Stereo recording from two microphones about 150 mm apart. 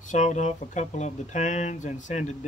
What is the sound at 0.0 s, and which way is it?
Speech, 55° left (ahead or behind).